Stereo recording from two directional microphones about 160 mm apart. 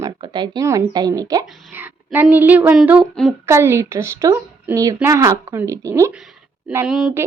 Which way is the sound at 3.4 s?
15° right (ahead or behind).